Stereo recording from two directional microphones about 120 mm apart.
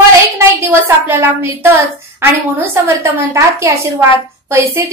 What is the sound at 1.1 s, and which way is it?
A woman's voice, 20° right (ahead or behind).